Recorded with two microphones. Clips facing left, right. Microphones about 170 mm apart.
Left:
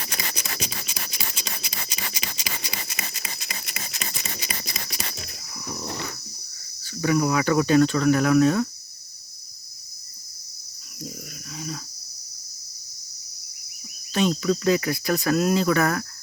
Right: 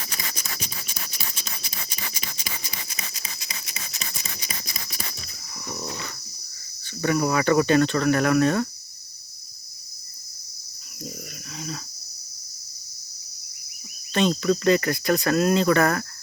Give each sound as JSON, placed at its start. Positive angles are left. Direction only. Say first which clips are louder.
{"t": 0.1, "sound": "a sound", "louder": "left 3 dB", "side_deg": 75}
{"t": 6.8, "sound": "speech", "louder": "left 1 dB", "side_deg": 5}
{"t": 11.5, "sound": "cricket", "louder": "left 1 dB", "side_deg": 5}
{"t": 14.1, "sound": "speech", "louder": "right 1 dB", "side_deg": 5}